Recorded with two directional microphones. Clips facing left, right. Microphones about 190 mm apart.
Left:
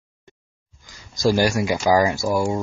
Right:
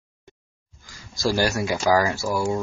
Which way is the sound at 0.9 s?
15° left (ahead or behind).